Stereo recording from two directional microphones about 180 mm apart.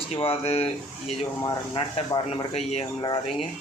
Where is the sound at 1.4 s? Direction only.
25° left (ahead or behind).